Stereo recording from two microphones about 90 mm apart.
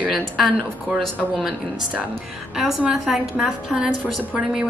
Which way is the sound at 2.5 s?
5° right (ahead or behind).